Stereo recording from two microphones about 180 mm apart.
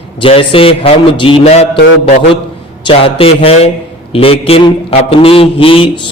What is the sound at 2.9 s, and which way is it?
A man's voice, 30° left (ahead or behind).